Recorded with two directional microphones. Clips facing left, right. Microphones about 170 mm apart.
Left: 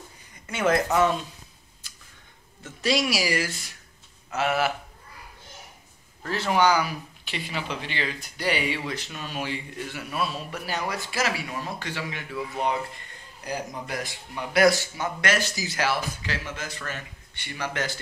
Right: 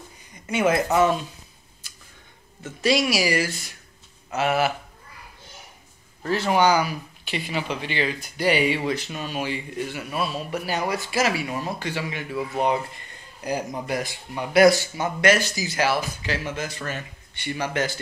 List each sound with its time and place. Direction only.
0.5 s speech: 10° right (ahead or behind)
2.8 s speech: centre (ahead or behind)
6.2 s speech: 10° right (ahead or behind)